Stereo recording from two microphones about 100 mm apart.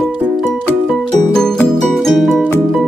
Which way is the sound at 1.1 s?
5° left (ahead or behind).